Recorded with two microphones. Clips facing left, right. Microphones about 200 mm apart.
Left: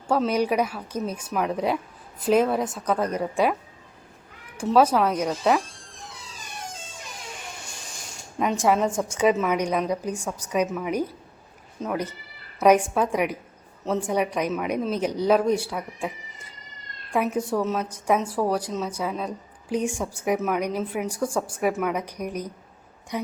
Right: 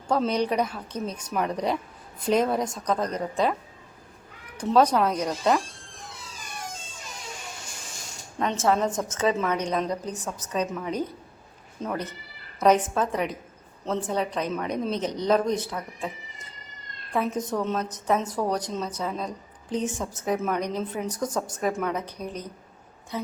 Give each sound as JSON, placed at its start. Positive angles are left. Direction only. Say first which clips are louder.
{"t": 0.1, "sound": "a woman's voice", "louder": "left 2 dB", "side_deg": 10}
{"t": 4.5, "sound": "a woman's voice", "louder": "left 1 dB", "side_deg": 5}
{"t": 8.4, "sound": "a woman's voice", "louder": "left 2 dB", "side_deg": 10}